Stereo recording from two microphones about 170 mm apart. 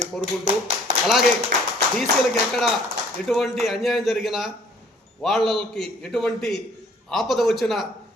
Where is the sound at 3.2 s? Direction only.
Centre (ahead or behind).